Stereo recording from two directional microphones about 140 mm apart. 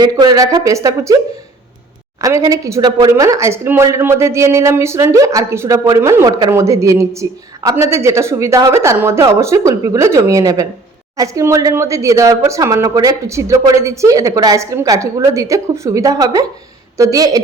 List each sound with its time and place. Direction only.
0.0 s a woman's voice: 30° right (ahead or behind)
2.2 s a woman's voice: 25° right (ahead or behind)